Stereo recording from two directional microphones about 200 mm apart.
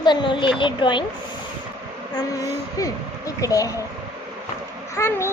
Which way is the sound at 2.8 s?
15° left (ahead or behind).